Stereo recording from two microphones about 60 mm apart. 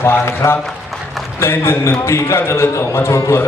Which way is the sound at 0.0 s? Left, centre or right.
Left.